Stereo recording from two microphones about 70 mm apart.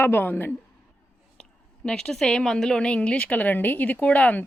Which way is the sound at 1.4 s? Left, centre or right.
Centre.